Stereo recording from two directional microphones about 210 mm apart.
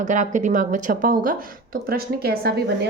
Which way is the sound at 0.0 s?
35° right (ahead or behind).